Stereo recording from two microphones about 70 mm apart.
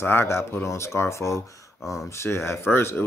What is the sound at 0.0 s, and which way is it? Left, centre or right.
Speech, left.